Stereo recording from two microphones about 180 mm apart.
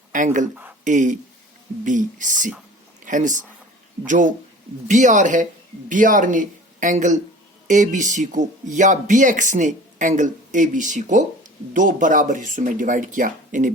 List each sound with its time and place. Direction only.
0.1 s speech: 45° right (ahead or behind)